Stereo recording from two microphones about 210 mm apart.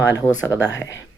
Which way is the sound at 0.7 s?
60° left (ahead or behind).